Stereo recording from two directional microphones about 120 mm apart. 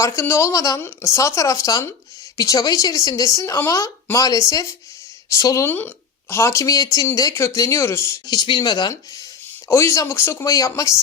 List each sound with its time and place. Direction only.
0.0 s speech: 25° left (ahead or behind)
5.6 s speech: 15° left (ahead or behind)
8.3 s speech: 40° left (ahead or behind)
9.6 s speech: 25° left (ahead or behind)